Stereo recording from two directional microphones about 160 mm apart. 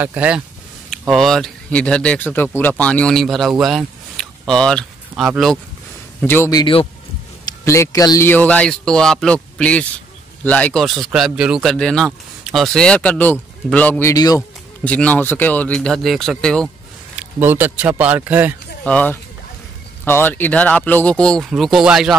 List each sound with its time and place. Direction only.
0.0 s a man's voice: 10° right (ahead or behind)
5.2 s speech: 5° right (ahead or behind)
6.2 s speech: 15° left (ahead or behind)
6.6 s a man's voice: 35° left (ahead or behind)
7.4 s a man's voice: 20° left (ahead or behind)
14.1 s speech: 25° left (ahead or behind)
14.9 s a man's voice: 10° left (ahead or behind)
17.1 s speech: 10° right (ahead or behind)
18.9 s speech: 10° left (ahead or behind)